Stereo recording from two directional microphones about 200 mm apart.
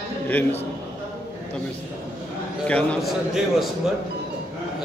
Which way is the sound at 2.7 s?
5° left (ahead or behind).